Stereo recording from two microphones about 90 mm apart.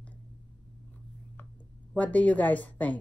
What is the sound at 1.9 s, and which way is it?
Speech, 15° left (ahead or behind).